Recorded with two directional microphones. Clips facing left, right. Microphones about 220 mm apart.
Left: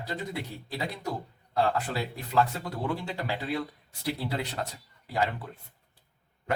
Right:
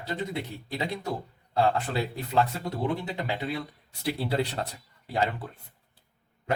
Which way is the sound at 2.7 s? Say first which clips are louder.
Right 3 dB; 20° right (ahead or behind).